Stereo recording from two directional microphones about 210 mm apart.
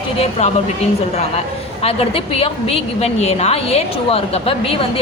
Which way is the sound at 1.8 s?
30° left (ahead or behind).